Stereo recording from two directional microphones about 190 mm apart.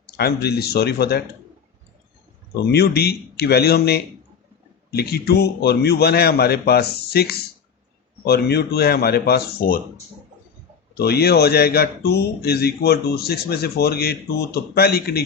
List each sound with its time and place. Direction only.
0.2 s a man's voice: 55° left (ahead or behind)
2.7 s a man's voice: 60° left (ahead or behind)
10.9 s a man's voice: 55° left (ahead or behind)